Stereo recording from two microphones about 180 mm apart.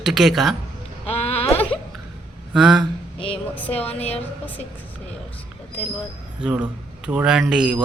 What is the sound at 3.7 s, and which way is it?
Speech, 35° left (ahead or behind).